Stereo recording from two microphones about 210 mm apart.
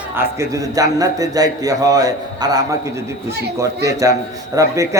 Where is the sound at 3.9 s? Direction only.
15° right (ahead or behind).